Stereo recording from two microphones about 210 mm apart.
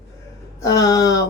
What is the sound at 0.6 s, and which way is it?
Speech, 15° left (ahead or behind).